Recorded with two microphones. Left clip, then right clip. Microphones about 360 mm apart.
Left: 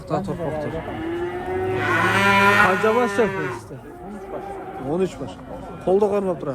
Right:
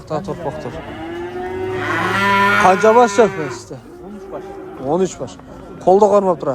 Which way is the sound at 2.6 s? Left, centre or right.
Centre.